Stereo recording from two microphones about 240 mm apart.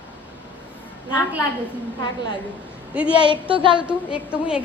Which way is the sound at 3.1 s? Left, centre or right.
Centre.